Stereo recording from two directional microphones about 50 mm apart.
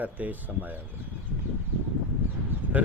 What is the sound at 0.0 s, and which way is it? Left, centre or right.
Speech, right.